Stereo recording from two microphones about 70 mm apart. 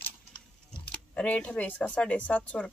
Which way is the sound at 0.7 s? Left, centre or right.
Centre.